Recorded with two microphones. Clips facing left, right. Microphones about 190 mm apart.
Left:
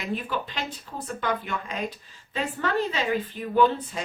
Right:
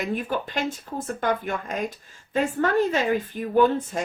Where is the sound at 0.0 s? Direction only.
50° right (ahead or behind).